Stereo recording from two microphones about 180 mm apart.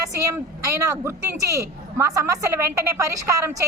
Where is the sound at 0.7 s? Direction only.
15° right (ahead or behind).